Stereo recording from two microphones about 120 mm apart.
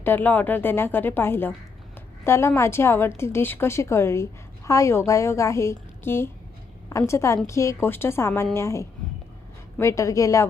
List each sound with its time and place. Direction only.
0.0 s a woman's voice: 15° left (ahead or behind)